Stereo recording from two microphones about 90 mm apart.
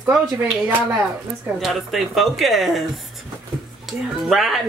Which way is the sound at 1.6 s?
Centre (ahead or behind).